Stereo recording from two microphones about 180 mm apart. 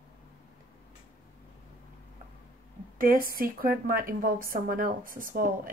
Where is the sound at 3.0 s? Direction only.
50° right (ahead or behind).